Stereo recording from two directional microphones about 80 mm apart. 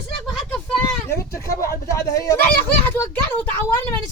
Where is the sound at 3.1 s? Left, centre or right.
Centre.